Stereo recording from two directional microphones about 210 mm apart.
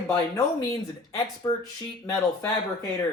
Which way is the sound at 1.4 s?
15° left (ahead or behind).